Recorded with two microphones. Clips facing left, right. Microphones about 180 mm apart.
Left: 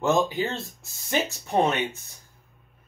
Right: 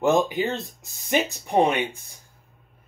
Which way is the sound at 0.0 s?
15° right (ahead or behind).